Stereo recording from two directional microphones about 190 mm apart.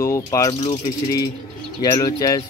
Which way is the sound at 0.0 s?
15° left (ahead or behind).